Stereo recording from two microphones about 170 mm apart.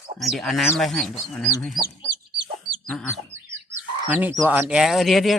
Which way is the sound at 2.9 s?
Centre (ahead or behind).